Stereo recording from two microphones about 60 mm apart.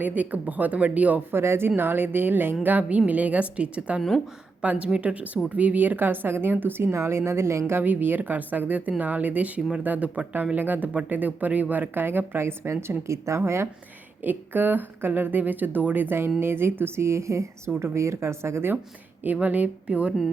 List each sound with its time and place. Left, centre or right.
0.0 s speech: right
1.3 s a woman's voice: right
7.7 s speech: right
14.3 s a woman's voice: right
19.2 s speech: right